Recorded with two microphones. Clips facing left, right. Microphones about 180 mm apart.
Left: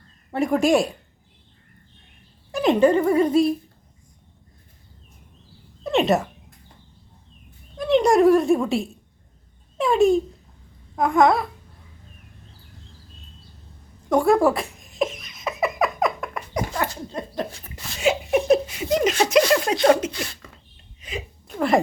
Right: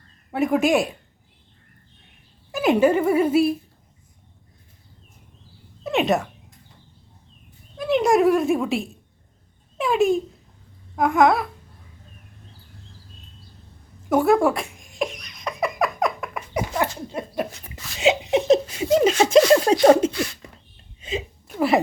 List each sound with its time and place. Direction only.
0.3 s speech: centre (ahead or behind)
2.5 s speech: 5° right (ahead or behind)
5.8 s speech: centre (ahead or behind)
7.8 s speech: centre (ahead or behind)
14.1 s giggle: centre (ahead or behind)
17.1 s speech: 10° right (ahead or behind)
18.0 s laughter: 20° right (ahead or behind)
18.9 s chuckle: 30° right (ahead or behind)
19.3 s speech: 30° right (ahead or behind)
21.0 s a sound: 25° right (ahead or behind)
21.4 s a sound: 5° right (ahead or behind)